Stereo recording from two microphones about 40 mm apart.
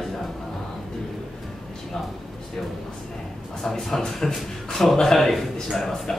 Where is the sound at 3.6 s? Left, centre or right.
Centre.